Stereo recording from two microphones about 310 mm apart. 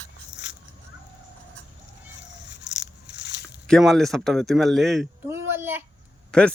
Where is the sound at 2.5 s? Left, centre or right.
Left.